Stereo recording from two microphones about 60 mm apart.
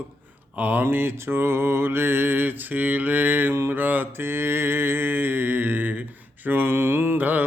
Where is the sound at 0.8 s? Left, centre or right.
Right.